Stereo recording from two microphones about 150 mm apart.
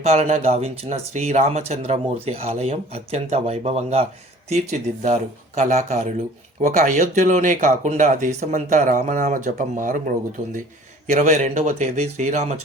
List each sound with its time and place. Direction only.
0.0 s speech: 45° right (ahead or behind); by 10.0 s 60° right (ahead or behind)
11.0 s speech: 55° right (ahead or behind)